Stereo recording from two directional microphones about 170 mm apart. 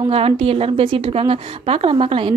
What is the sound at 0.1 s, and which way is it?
A woman's voice, 35° right (ahead or behind).